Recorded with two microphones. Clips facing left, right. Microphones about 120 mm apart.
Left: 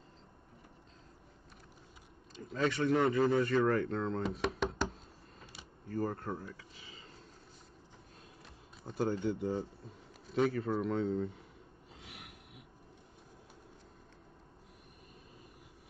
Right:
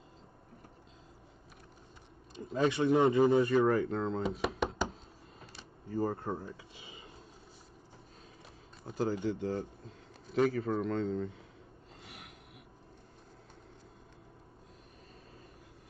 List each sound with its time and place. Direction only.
2.5 s speech: 15° right (ahead or behind)
5.9 s speech: 10° right (ahead or behind)
8.8 s a man's voice: centre (ahead or behind)
12.1 s a sound: 70° left (ahead or behind)